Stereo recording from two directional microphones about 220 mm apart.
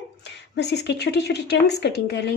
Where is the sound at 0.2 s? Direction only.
50° left (ahead or behind).